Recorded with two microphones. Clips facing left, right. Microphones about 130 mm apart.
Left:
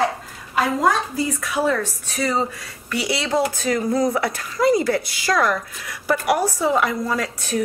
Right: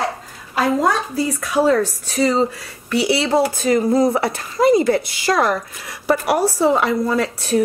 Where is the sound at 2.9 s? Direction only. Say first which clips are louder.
Right 5 dB; 30° right (ahead or behind).